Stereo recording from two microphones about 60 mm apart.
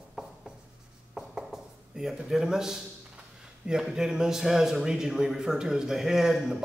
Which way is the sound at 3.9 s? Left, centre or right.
Centre.